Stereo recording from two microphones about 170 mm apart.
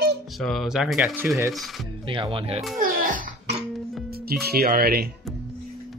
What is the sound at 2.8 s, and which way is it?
Music, 60° right (ahead or behind).